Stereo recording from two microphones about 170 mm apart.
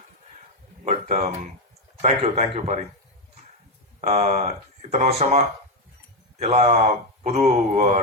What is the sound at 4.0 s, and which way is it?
Speech, 40° right (ahead or behind).